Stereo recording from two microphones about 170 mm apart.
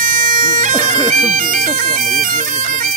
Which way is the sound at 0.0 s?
50° right (ahead or behind).